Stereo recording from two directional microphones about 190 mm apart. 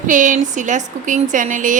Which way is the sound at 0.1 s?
40° right (ahead or behind).